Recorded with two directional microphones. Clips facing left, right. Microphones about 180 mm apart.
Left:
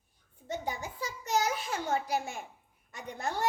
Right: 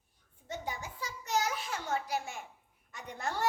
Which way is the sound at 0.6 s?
40° left (ahead or behind).